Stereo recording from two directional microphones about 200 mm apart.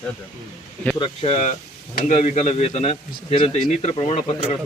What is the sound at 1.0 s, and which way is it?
Speech, 30° left (ahead or behind).